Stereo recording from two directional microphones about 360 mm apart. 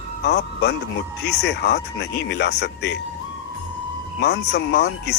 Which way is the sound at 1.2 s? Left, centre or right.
Left.